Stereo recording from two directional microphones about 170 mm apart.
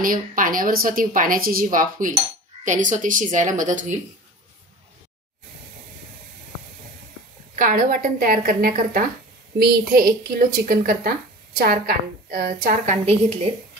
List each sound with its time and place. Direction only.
0.0 s a woman's voice: 55° right (ahead or behind)
7.5 s a woman's voice: 50° right (ahead or behind)